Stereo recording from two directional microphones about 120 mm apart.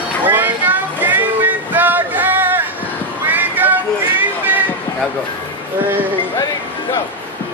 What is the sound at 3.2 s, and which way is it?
Music, 15° right (ahead or behind).